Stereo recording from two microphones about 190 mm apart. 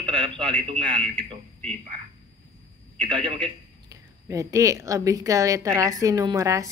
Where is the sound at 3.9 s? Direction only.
15° right (ahead or behind).